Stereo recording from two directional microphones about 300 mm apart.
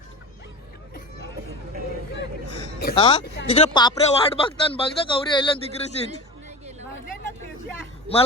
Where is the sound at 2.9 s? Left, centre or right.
Centre.